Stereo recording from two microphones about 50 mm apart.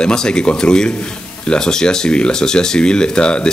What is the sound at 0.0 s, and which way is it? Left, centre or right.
Speech, centre.